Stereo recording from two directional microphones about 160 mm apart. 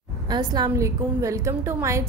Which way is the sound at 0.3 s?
25° right (ahead or behind).